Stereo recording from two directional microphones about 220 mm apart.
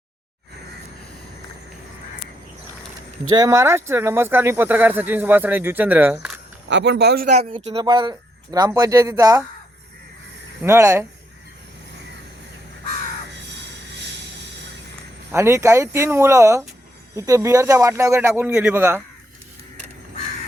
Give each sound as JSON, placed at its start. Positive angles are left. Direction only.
{"t": 3.2, "sound": "speech", "side_deg": -15}
{"t": 6.7, "sound": "speech", "side_deg": -55}
{"t": 7.3, "sound": "speech", "side_deg": -25}
{"t": 10.6, "sound": "speech", "side_deg": -10}
{"t": 15.3, "sound": "speech", "side_deg": -10}